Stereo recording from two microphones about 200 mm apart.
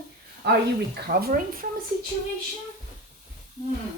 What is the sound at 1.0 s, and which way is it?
Speech, 45° right (ahead or behind).